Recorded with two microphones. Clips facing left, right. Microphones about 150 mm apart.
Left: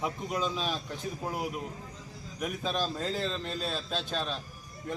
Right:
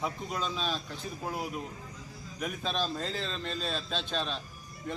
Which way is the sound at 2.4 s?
10° left (ahead or behind).